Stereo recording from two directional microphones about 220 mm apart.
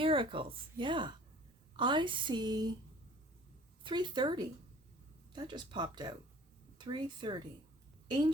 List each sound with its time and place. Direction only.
0.0 s a woman's voice: 25° right (ahead or behind)
3.8 s a woman's voice: 20° right (ahead or behind)